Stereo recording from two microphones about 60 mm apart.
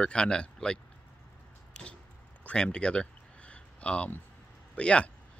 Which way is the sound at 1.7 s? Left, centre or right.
Centre.